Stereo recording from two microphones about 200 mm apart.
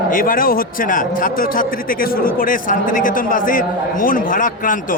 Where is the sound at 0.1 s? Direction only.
45° left (ahead or behind).